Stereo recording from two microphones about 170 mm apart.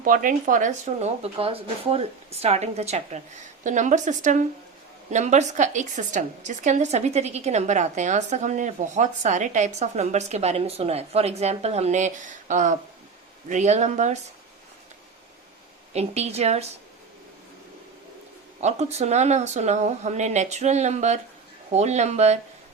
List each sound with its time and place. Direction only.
0.0 s a woman's voice: 55° right (ahead or behind)
15.9 s speech: 40° right (ahead or behind)
18.6 s speech: 40° right (ahead or behind)